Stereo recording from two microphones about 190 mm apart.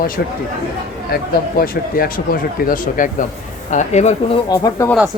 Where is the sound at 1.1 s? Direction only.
50° left (ahead or behind); by 4.2 s 35° left (ahead or behind).